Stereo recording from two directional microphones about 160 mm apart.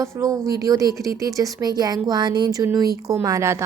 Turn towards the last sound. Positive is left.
turn(degrees=-20)  # may be behind; listen again after turning